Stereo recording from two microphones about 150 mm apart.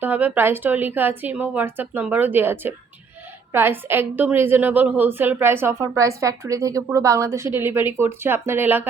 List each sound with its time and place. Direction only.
0.0 s a woman's voice: 10° right (ahead or behind)